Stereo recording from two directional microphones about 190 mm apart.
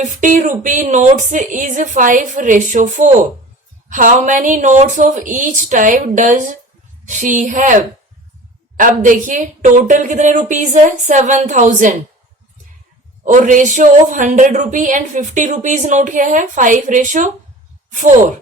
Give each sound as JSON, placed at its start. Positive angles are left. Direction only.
{"t": 0.0, "sound": "speech", "side_deg": -40}
{"t": 13.2, "sound": "speech", "side_deg": -40}